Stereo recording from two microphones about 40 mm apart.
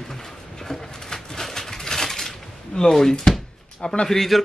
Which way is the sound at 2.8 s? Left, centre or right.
Centre.